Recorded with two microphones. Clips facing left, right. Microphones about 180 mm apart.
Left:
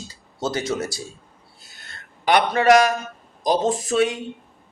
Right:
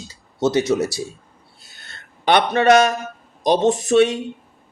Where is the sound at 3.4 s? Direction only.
25° right (ahead or behind).